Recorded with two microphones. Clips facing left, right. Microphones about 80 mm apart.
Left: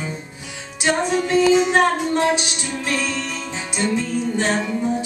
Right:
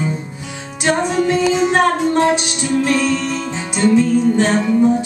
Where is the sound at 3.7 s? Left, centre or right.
Centre.